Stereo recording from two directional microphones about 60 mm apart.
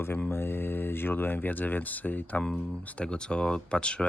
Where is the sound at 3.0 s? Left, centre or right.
Centre.